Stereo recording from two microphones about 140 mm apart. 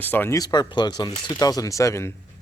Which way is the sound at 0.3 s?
25° left (ahead or behind).